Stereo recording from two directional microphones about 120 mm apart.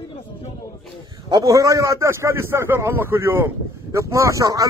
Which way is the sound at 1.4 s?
25° right (ahead or behind).